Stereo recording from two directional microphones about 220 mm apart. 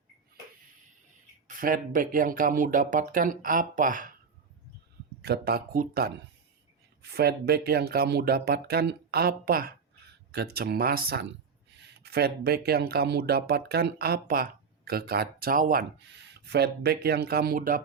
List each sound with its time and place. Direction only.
1.5 s speech: 40° right (ahead or behind)
5.2 s speech: 45° right (ahead or behind)